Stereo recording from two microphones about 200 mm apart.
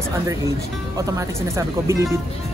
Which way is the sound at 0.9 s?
15° right (ahead or behind).